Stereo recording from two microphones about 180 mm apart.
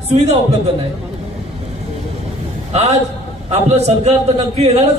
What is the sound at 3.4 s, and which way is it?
A man's voice, 40° right (ahead or behind).